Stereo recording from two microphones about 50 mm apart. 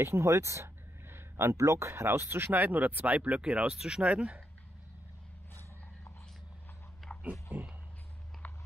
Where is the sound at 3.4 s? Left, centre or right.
Right.